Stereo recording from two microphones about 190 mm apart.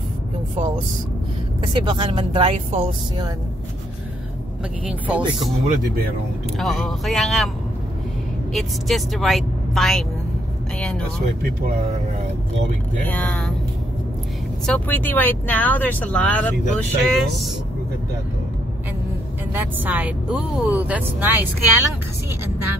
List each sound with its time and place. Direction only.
1.6 s speech: 25° right (ahead or behind)
4.8 s speech: 5° right (ahead or behind)
6.6 s a woman's voice: centre (ahead or behind)
8.5 s a woman's voice: centre (ahead or behind)
13.0 s speech: 10° left (ahead or behind)
14.7 s speech: 10° left (ahead or behind)
19.5 s speech: 10° right (ahead or behind)